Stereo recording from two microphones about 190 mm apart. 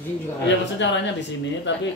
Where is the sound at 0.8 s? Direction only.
70° left (ahead or behind).